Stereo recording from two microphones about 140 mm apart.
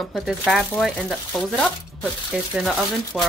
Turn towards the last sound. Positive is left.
turn(degrees=15)  # may be behind; listen again after turning